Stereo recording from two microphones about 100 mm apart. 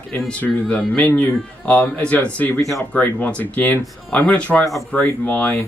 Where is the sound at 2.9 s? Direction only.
15° left (ahead or behind).